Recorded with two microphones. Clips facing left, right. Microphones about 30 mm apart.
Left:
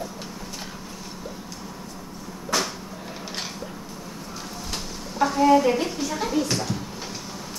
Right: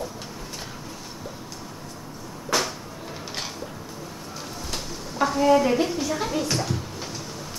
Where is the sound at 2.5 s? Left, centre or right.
Centre.